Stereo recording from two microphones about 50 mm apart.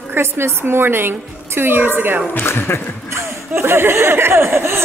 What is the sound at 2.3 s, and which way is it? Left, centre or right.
Speech, left.